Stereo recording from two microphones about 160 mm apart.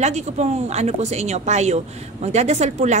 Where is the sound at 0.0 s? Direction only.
45° right (ahead or behind).